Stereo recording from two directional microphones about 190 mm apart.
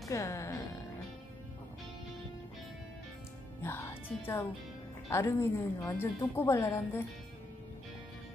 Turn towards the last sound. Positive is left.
turn(degrees=15)  # may be behind; listen again after turning